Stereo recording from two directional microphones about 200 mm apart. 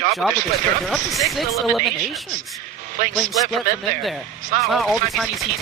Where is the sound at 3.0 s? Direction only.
40° right (ahead or behind).